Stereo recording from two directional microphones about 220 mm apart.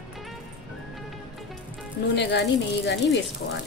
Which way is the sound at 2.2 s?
50° left (ahead or behind).